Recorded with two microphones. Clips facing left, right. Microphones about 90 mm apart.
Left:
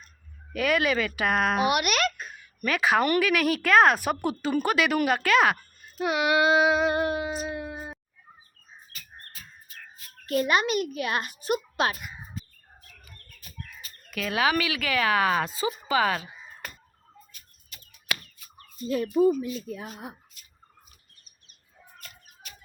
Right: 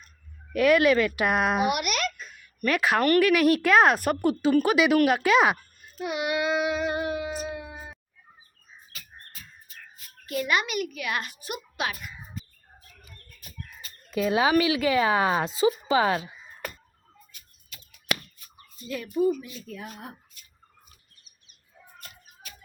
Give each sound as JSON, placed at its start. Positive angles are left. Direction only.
{"t": 0.5, "sound": "speech", "side_deg": 0}
{"t": 1.7, "sound": "babbling", "side_deg": 70}
{"t": 2.6, "sound": "speech", "side_deg": 0}
{"t": 5.2, "sound": "speech", "side_deg": -15}
{"t": 6.0, "sound": "child singing", "side_deg": 90}
{"t": 10.2, "sound": "a child's voice", "side_deg": 45}
{"t": 10.5, "sound": "a child's voice", "side_deg": 30}
{"t": 14.1, "sound": "speech", "side_deg": -25}
{"t": 19.6, "sound": "speech", "side_deg": 20}